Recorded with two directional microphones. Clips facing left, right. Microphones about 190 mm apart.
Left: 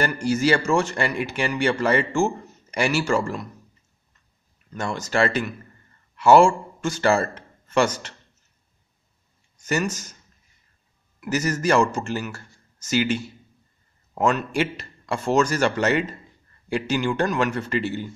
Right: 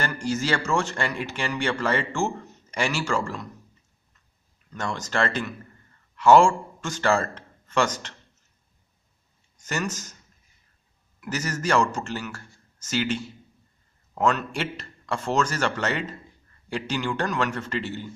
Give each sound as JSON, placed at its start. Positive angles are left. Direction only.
{"t": 0.0, "sound": "speech", "side_deg": 10}
{"t": 4.7, "sound": "a man's voice", "side_deg": 10}
{"t": 9.7, "sound": "speech", "side_deg": 10}
{"t": 11.1, "sound": "speech", "side_deg": 10}